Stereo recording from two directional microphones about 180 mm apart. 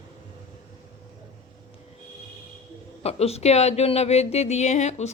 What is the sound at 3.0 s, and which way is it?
Speech, 35° left (ahead or behind).